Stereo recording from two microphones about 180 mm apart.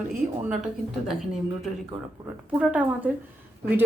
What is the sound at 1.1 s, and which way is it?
Speech, centre (ahead or behind).